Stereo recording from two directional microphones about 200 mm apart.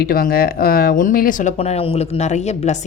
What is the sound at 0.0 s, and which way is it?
Speech, 50° left (ahead or behind).